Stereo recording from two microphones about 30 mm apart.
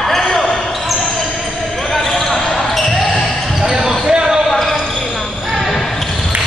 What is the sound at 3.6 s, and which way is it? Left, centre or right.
Basketball bounce, right.